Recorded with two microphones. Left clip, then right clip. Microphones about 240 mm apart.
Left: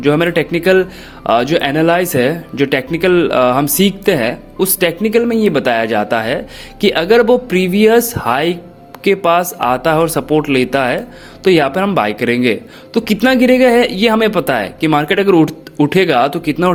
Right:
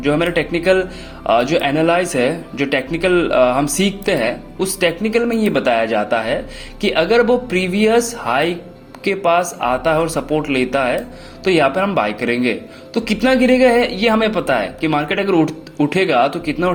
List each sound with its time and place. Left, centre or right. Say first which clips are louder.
0.0 s speech: left 4 dB; left